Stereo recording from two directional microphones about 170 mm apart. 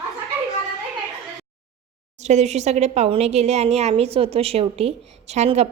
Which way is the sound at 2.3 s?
40° right (ahead or behind).